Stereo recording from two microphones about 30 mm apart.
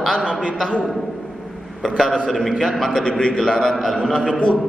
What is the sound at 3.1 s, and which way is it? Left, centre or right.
Speech, left.